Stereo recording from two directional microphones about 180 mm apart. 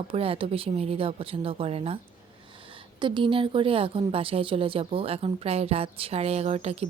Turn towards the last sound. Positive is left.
turn(degrees=-35)  # may be behind; listen again after turning